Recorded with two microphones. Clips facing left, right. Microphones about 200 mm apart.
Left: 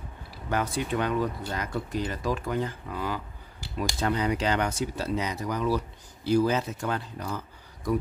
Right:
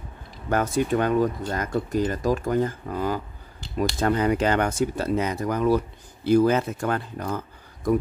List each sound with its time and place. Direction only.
0.5 s speech: 45° right (ahead or behind)